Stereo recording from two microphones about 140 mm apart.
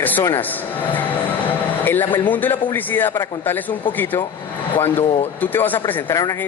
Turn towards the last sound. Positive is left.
turn(degrees=20)  # may be behind; listen again after turning